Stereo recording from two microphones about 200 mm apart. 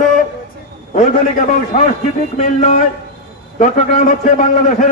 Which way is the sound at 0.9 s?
40° left (ahead or behind).